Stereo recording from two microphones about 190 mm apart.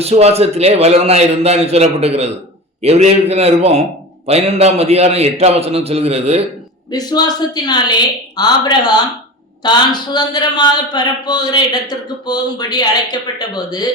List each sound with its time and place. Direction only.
0.0 s a man's voice: 35° right (ahead or behind)
6.9 s a man's voice: 20° left (ahead or behind)